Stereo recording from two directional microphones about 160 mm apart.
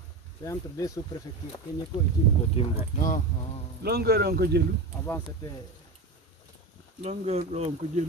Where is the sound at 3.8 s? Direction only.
90° right.